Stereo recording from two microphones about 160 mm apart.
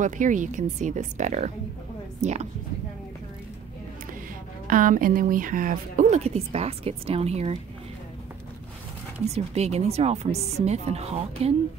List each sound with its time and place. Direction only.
0.0 s a woman's voice: 50° right (ahead or behind)
4.6 s a woman's voice: 55° right (ahead or behind); by 7.5 s 40° right (ahead or behind)
9.3 s speech: 40° right (ahead or behind)